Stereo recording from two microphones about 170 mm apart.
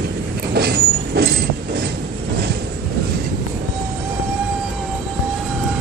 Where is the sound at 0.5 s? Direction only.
65° right (ahead or behind).